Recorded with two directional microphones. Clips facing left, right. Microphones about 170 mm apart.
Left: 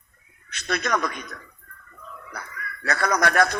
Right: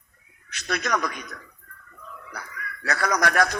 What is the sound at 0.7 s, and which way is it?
Speech, 25° left (ahead or behind).